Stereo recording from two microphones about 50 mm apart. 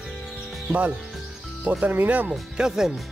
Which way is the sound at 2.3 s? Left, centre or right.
Centre.